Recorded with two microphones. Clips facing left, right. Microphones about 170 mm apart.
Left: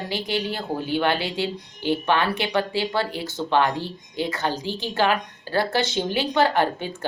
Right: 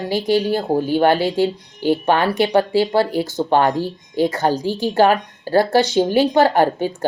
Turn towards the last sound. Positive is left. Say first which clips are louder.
# right 6 dB
turn(degrees=-45)  # may be behind; listen again after turning